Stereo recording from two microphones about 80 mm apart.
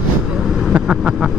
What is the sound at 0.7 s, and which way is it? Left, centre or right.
Speech, centre.